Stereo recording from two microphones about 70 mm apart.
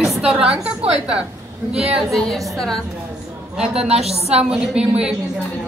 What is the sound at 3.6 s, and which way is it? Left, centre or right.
A woman's voice, centre.